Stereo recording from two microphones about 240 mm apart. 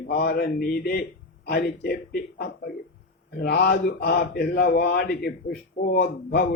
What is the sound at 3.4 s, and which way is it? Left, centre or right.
A man's voice, left.